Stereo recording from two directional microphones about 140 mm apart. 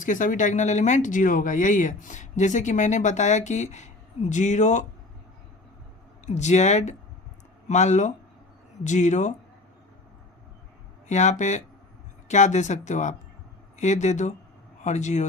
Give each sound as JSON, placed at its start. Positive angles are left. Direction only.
{"t": 0.0, "sound": "speech", "side_deg": 70}
{"t": 6.2, "sound": "speech", "side_deg": 55}
{"t": 11.1, "sound": "speech", "side_deg": 55}